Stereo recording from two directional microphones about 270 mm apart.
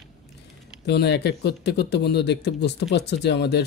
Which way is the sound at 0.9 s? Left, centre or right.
Left.